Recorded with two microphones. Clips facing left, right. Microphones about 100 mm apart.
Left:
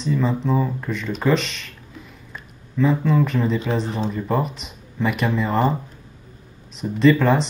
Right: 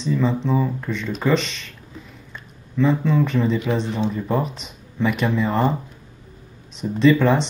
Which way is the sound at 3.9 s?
35° left (ahead or behind).